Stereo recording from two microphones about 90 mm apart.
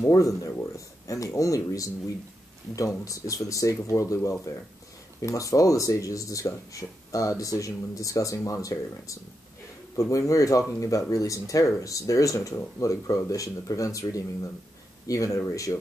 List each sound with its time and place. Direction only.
0.0 s speech: 35° left (ahead or behind)
3.1 s speech: 40° left (ahead or behind)